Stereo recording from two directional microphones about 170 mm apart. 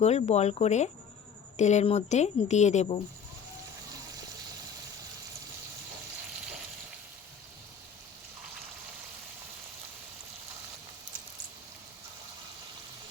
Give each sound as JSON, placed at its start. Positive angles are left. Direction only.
{"t": 0.0, "sound": "a woman's voice", "side_deg": 40}